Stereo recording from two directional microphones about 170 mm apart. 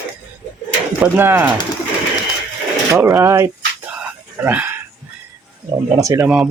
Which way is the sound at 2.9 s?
15° right (ahead or behind).